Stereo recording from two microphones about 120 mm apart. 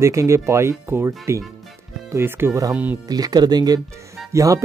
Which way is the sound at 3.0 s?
30° right (ahead or behind).